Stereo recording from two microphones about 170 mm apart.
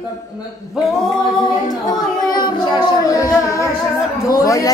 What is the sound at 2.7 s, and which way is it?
Music, 20° left (ahead or behind).